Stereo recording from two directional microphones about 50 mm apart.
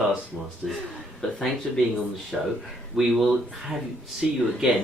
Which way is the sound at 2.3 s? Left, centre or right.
Centre.